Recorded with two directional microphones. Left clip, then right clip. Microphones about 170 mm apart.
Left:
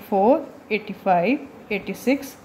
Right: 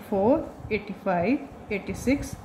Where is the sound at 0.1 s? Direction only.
35° left (ahead or behind).